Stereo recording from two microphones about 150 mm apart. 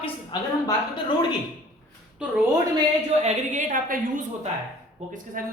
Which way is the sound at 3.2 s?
55° right (ahead or behind).